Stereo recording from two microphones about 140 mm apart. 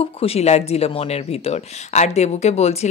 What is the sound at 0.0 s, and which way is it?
Speech, 45° left (ahead or behind).